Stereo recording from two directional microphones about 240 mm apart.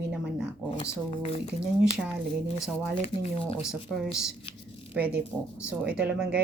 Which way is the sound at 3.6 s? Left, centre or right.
Centre.